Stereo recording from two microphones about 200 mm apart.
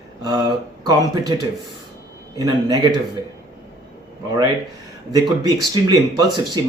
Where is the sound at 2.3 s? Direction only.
20° right (ahead or behind).